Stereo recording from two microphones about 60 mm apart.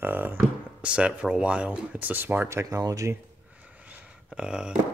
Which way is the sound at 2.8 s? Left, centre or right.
Right.